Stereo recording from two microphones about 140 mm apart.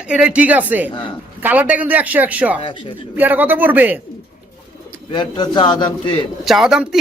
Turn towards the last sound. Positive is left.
turn(degrees=-5)  # may be behind; listen again after turning